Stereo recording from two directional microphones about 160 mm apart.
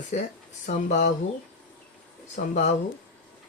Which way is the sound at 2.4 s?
65° left (ahead or behind).